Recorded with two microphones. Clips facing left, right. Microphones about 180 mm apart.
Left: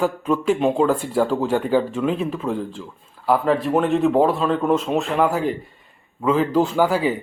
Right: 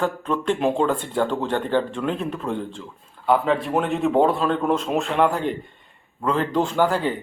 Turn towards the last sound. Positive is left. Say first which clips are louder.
# left 2 dB
turn(degrees=5)  # may be behind; listen again after turning